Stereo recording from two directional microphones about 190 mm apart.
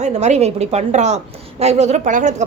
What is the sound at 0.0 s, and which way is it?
A woman's voice, 35° right (ahead or behind).